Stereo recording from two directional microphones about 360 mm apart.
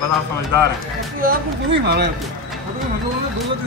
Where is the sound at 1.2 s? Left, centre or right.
Right.